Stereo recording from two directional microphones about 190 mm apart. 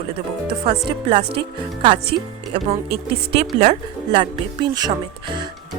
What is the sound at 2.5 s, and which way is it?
Speech, 30° right (ahead or behind).